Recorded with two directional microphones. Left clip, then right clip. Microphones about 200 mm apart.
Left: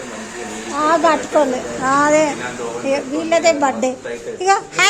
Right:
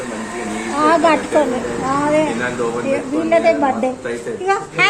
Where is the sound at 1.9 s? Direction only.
35° left (ahead or behind).